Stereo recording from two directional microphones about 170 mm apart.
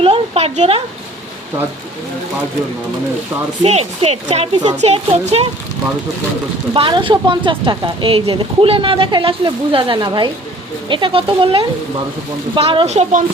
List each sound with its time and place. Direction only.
0.0 s a sound: 35° right (ahead or behind)
3.6 s speech: 35° right (ahead or behind)
6.7 s a woman's voice: 30° right (ahead or behind)